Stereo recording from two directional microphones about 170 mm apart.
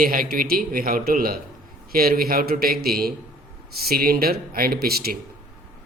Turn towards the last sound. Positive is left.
turn(degrees=-65)  # may be behind; listen again after turning